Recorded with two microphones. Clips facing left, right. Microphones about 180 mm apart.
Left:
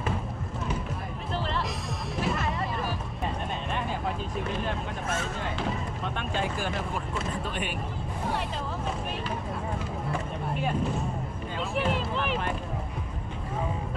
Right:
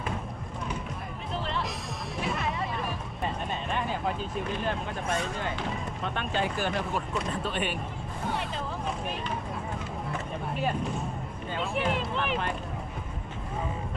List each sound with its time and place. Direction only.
1.3 s music: centre (ahead or behind)
4.6 s speech: 5° left (ahead or behind)
10.5 s speech: centre (ahead or behind)
11.7 s a sound: centre (ahead or behind)